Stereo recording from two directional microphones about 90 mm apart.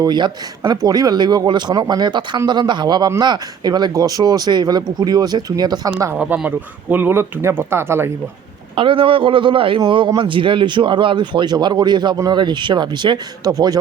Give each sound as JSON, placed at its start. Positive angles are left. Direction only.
{"t": 0.0, "sound": "speech", "side_deg": -50}
{"t": 6.1, "sound": "speech", "side_deg": -15}
{"t": 8.7, "sound": "a man's voice", "side_deg": -75}
{"t": 13.5, "sound": "speech", "side_deg": -45}